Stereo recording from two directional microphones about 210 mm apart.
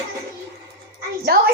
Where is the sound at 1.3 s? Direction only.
45° right (ahead or behind).